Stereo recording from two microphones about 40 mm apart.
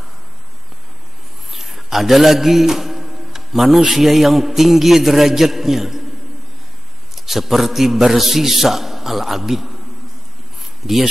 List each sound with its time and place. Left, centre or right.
1.5 s a sound: centre
3.9 s a man's voice: centre
7.2 s a man's voice: centre